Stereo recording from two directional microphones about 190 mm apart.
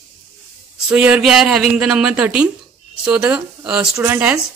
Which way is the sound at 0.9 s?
5° right (ahead or behind).